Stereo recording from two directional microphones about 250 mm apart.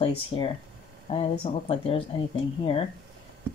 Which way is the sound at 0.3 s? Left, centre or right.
Left.